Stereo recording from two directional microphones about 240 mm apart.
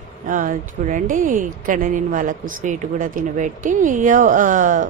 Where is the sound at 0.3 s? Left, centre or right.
Right.